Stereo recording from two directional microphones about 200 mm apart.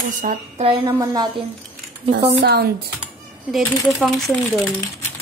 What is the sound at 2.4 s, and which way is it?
Speech, 55° right (ahead or behind).